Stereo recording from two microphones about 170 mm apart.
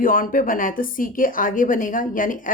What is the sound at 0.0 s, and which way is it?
A woman's voice, 55° left (ahead or behind).